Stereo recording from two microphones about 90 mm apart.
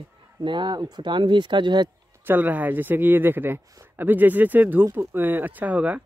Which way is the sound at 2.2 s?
20° right (ahead or behind).